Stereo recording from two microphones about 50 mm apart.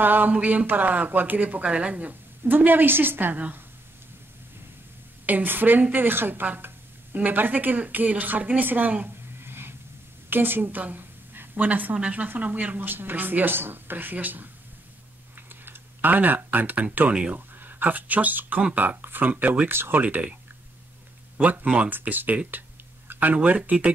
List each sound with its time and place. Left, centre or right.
0.0 s speech: right
0.3 s speech: right
5.2 s speech: right
9.4 s a sound: right
10.3 s a woman's voice: right
12.9 s speech: right
15.6 s speech: right
19.7 s speech: right
20.0 s speech: right
21.4 s speech: right